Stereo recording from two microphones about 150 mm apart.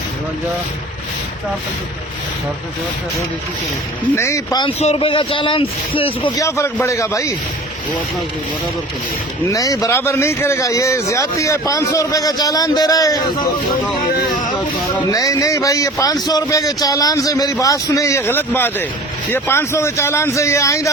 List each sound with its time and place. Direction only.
4.1 s a man's voice: 20° left (ahead or behind)
4.8 s a man's voice: 40° left (ahead or behind)
6.8 s a man's voice: 20° left (ahead or behind)
9.5 s a man's voice: 25° left (ahead or behind)
14.1 s speech: 85° left
15.1 s a man's voice: 20° left (ahead or behind)